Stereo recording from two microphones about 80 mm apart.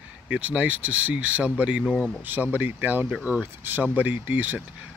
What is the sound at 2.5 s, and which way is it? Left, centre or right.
Speech, right.